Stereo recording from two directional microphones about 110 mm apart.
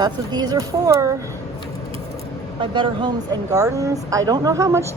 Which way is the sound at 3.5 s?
30° right (ahead or behind).